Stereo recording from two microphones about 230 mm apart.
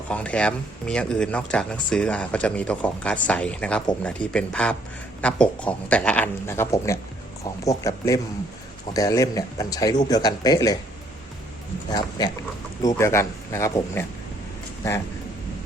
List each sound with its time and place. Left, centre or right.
0.1 s speech: centre
11.9 s speech: centre